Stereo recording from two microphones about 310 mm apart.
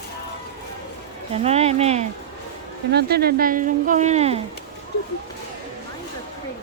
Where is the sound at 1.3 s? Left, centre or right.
Centre.